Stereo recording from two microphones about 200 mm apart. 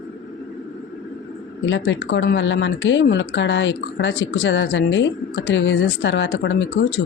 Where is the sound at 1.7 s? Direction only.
70° left (ahead or behind).